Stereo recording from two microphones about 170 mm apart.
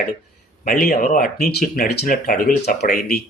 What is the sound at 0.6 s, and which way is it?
Speech, 55° left (ahead or behind).